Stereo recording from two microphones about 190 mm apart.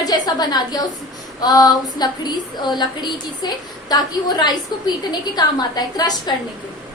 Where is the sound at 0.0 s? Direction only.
20° left (ahead or behind).